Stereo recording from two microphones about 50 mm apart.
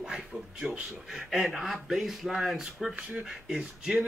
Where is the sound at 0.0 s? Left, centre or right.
Centre.